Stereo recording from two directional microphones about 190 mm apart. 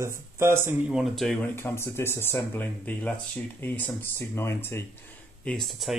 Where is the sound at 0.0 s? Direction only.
15° right (ahead or behind).